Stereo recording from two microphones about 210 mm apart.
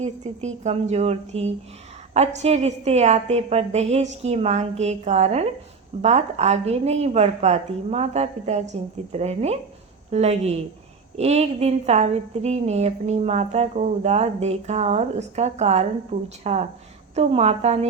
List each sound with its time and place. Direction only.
0.0 s a woman's voice: 30° right (ahead or behind)